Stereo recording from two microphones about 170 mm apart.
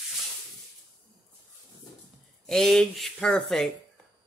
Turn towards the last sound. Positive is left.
turn(degrees=5)  # may be behind; listen again after turning